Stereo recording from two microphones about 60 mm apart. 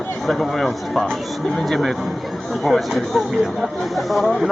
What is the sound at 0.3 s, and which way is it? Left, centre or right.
Speech, centre.